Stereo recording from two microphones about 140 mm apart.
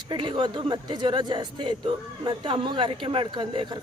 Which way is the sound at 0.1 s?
35° right (ahead or behind).